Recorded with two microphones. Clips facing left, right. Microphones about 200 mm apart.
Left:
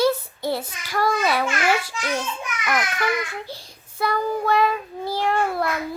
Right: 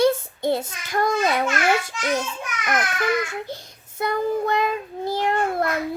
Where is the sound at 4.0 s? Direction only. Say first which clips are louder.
Right 1 dB; 20° right (ahead or behind).